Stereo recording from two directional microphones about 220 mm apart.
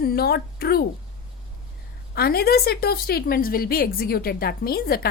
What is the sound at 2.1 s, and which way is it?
Speech, 45° left (ahead or behind).